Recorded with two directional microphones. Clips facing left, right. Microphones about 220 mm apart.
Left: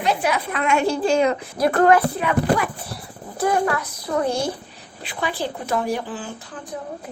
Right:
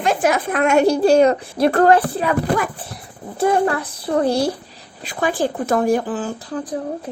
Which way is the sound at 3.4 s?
30° right (ahead or behind).